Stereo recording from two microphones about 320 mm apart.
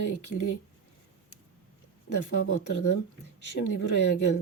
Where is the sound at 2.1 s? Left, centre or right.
Left.